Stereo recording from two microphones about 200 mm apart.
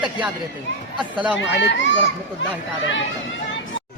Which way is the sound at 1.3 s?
60° left (ahead or behind).